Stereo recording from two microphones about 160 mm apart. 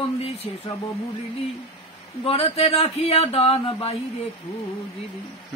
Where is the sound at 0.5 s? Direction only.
35° left (ahead or behind).